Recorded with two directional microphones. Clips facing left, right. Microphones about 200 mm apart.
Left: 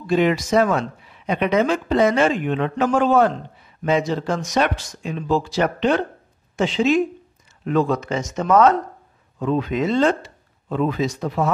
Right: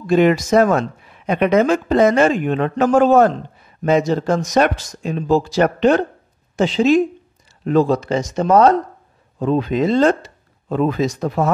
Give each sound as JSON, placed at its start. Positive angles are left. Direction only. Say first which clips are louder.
{"t": 0.0, "sound": "speech", "louder": "right 4 dB", "side_deg": -50}